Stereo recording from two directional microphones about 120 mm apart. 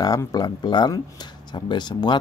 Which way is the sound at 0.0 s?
30° left (ahead or behind).